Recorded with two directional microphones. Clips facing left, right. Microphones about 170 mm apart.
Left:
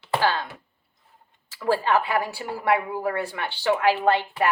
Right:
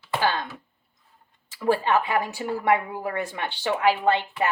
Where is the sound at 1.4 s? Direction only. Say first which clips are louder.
Even; 20° right (ahead or behind).